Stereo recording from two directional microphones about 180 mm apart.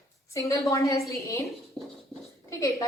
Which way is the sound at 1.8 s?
Centre (ahead or behind).